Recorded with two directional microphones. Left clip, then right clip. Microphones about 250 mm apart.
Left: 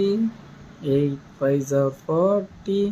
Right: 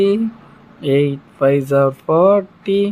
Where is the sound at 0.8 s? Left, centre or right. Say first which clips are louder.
Right 7 dB; centre.